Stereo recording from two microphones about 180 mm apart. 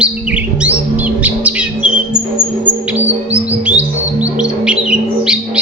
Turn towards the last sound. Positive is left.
turn(degrees=-5)  # may be behind; listen again after turning